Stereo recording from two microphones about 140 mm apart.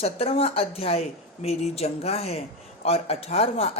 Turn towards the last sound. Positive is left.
turn(degrees=50)  # may be behind; listen again after turning